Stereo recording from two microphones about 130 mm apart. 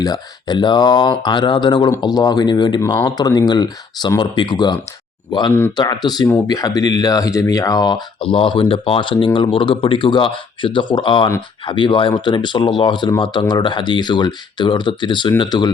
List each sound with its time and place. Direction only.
0.0 s speech: 30° left (ahead or behind)